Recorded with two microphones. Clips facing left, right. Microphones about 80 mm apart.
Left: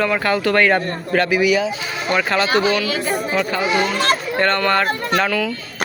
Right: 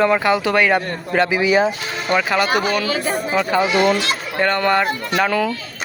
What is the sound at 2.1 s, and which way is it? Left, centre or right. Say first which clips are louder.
Speech: even; centre.